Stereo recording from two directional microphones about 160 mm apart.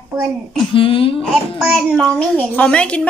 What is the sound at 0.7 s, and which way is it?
Speech, 35° left (ahead or behind).